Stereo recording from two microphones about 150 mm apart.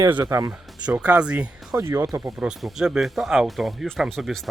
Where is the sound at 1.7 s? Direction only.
20° right (ahead or behind).